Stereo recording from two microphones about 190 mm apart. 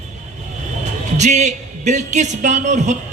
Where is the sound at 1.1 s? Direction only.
40° right (ahead or behind).